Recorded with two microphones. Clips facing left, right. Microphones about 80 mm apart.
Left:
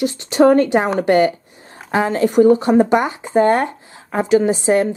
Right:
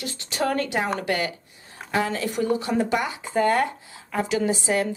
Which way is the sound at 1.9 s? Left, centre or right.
Left.